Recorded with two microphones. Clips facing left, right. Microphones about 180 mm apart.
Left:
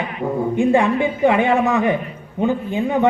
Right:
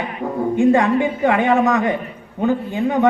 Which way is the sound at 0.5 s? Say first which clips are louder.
Right 2 dB; 15° left (ahead or behind).